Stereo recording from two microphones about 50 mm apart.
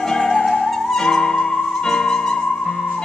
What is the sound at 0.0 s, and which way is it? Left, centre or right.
Music, centre.